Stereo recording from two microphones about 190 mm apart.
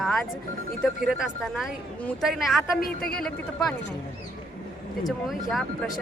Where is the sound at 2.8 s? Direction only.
50° left (ahead or behind).